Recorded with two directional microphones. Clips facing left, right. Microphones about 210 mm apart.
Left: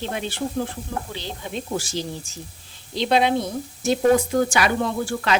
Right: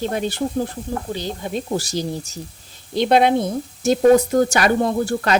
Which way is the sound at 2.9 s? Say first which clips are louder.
Right 4 dB; 50° right (ahead or behind).